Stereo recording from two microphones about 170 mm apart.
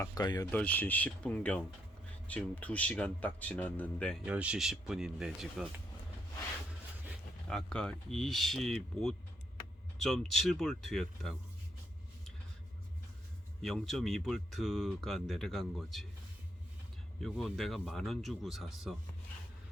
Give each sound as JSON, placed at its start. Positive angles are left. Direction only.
{"t": 0.0, "sound": "speech", "side_deg": 20}
{"t": 0.5, "sound": "a man's voice", "side_deg": 10}
{"t": 4.3, "sound": "speech", "side_deg": -5}
{"t": 7.5, "sound": "speech", "side_deg": 5}
{"t": 13.6, "sound": "speech", "side_deg": 0}
{"t": 17.2, "sound": "speech", "side_deg": 0}